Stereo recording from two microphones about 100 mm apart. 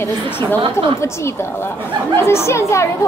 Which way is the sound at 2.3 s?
25° left (ahead or behind).